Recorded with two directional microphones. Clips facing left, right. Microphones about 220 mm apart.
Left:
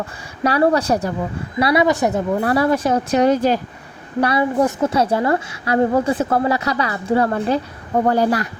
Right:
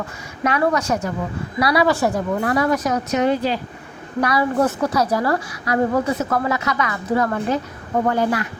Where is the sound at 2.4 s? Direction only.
30° left (ahead or behind).